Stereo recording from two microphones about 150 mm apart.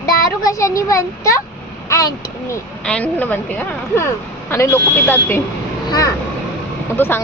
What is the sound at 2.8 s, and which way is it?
A woman's voice, 10° left (ahead or behind).